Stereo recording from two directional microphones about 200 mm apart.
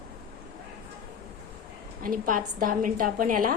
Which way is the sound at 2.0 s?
45° right (ahead or behind).